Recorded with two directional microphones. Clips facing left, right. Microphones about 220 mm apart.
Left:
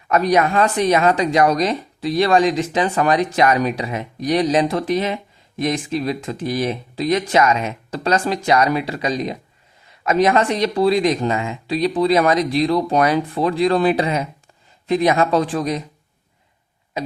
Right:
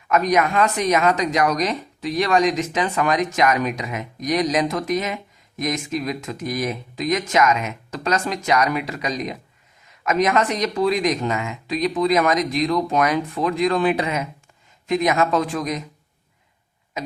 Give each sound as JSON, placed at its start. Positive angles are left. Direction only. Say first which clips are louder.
{"t": 0.1, "sound": "speech", "louder": "left 2 dB", "side_deg": 35}